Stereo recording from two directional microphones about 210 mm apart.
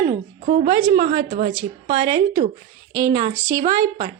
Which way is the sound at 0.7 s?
20° right (ahead or behind).